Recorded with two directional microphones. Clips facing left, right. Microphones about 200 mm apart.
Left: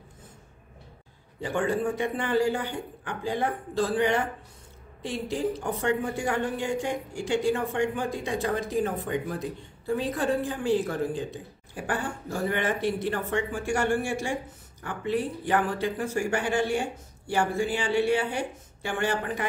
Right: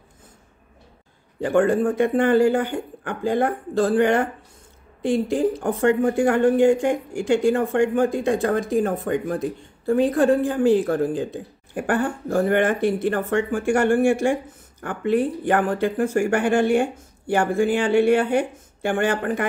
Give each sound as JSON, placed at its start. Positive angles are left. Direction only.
{"t": 1.4, "sound": "a woman's voice", "side_deg": -50}